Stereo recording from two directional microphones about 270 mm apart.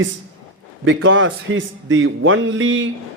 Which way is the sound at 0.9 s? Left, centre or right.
Right.